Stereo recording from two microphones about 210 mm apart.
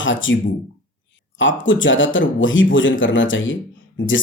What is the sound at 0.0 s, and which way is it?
Speech, 65° left (ahead or behind).